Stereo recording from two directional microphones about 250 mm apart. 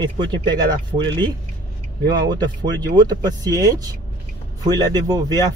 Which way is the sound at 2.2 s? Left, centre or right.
Centre.